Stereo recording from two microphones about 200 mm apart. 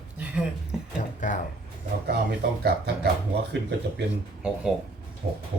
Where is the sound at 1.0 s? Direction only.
40° left (ahead or behind).